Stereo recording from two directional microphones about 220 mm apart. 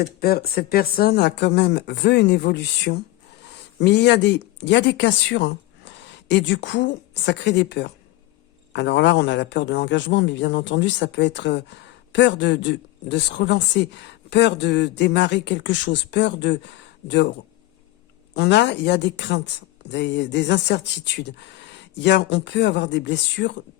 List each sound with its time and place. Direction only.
0.0 s a man's voice: 45° left (ahead or behind)
18.3 s a man's voice: 50° left (ahead or behind)